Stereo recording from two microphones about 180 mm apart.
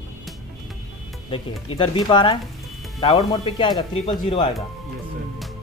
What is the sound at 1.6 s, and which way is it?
Speech, 30° left (ahead or behind).